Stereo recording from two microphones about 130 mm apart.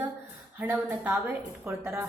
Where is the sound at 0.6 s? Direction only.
15° right (ahead or behind).